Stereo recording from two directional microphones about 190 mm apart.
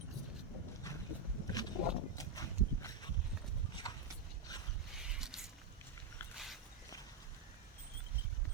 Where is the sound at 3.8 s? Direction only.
20° left (ahead or behind).